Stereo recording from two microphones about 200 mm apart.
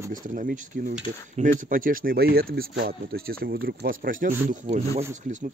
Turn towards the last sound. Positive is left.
turn(degrees=-40)  # may be behind; listen again after turning